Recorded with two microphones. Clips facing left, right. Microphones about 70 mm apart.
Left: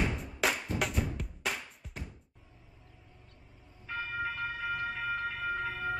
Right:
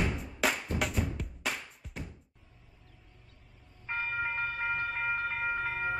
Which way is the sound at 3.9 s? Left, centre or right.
Right.